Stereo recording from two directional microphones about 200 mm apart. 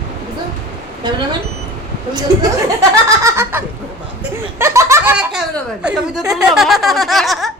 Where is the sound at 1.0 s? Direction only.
20° right (ahead or behind).